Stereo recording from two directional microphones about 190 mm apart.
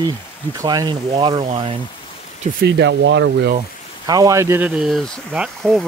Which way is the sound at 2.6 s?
65° right (ahead or behind).